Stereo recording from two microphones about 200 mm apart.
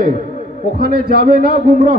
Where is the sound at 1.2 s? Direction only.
50° right (ahead or behind).